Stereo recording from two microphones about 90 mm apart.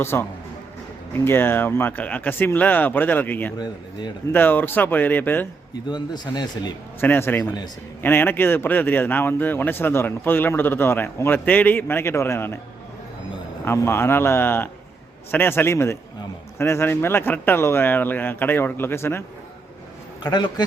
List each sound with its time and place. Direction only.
0.0 s a man's voice: 25° left (ahead or behind)
5.9 s speech: 55° left (ahead or behind)
7.0 s a man's voice: 25° left (ahead or behind)
7.4 s speech: 50° left (ahead or behind)
8.0 s a man's voice: 25° left (ahead or behind)
13.7 s a man's voice: 25° left (ahead or behind)
20.2 s speech: 55° left (ahead or behind)